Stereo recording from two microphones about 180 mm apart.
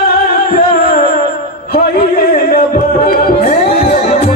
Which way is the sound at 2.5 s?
50° left (ahead or behind).